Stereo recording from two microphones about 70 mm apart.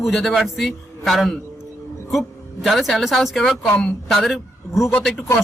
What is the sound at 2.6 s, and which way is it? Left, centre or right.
A man's voice, centre.